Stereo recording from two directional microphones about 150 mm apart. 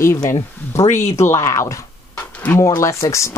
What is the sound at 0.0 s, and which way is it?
Speech, 20° left (ahead or behind).